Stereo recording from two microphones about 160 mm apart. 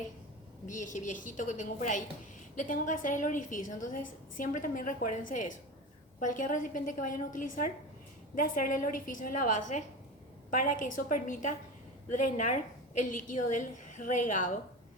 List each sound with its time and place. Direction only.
0.7 s a woman's voice: 50° left (ahead or behind)